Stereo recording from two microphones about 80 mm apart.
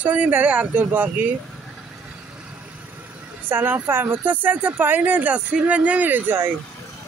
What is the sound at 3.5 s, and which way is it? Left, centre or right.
Speech, right.